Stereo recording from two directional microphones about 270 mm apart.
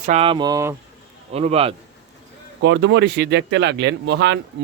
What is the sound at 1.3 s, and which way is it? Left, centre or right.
Speech, right.